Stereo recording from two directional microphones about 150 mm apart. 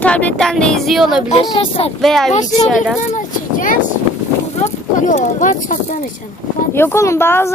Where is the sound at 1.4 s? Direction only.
35° left (ahead or behind).